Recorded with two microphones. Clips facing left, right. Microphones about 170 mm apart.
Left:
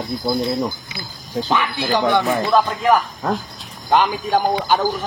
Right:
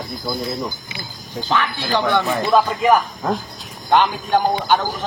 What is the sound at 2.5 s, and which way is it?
A man's voice, 5° right (ahead or behind).